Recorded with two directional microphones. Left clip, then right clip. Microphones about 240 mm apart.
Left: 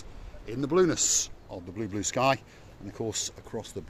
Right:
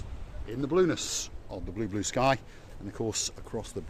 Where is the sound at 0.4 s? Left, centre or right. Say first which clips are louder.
Left 2 dB; left.